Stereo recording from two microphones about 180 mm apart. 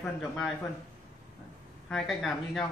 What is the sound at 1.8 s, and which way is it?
Speech, centre (ahead or behind).